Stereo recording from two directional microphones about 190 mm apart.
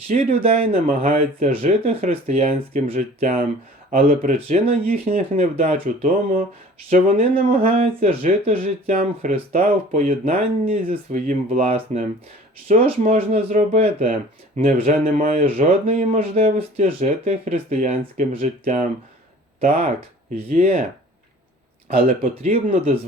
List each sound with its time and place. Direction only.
0.1 s speech: 35° right (ahead or behind)
0.7 s speech: 45° right (ahead or behind)
10.2 s speech: 35° right (ahead or behind)
16.8 s speech: 40° right (ahead or behind)
19.5 s speech: 35° right (ahead or behind)
20.5 s speech: 50° right (ahead or behind)
22.0 s speech: 45° right (ahead or behind)